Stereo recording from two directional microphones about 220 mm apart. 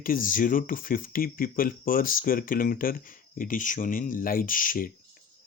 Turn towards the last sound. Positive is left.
turn(degrees=40)  # may be behind; listen again after turning